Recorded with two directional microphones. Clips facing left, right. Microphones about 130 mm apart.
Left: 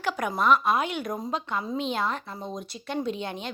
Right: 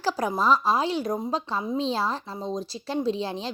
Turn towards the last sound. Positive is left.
turn(degrees=-30)  # may be behind; listen again after turning